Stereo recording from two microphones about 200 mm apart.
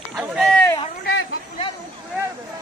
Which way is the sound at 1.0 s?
70° left (ahead or behind).